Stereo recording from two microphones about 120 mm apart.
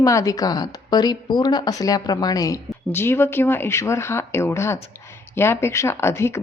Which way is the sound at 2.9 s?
20° left (ahead or behind).